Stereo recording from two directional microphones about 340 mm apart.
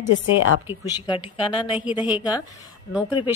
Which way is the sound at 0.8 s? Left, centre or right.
Centre.